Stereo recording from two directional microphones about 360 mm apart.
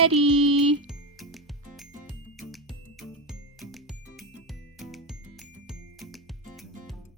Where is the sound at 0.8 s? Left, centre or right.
Centre.